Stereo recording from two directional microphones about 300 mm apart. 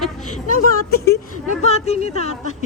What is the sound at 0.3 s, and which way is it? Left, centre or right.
A woman's voice, left.